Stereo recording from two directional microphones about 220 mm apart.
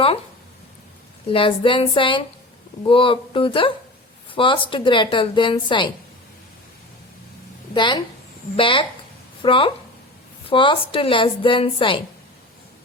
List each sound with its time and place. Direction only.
1.3 s a woman's voice: 25° left (ahead or behind)
7.7 s a woman's voice: 20° left (ahead or behind)